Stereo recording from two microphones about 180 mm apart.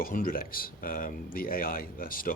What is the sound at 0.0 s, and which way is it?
Speech, 50° left (ahead or behind).